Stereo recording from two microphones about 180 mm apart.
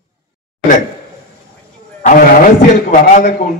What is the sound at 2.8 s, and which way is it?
Speech, 55° left (ahead or behind).